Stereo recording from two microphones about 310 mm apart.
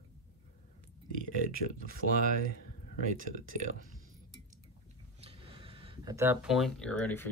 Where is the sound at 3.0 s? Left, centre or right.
Right.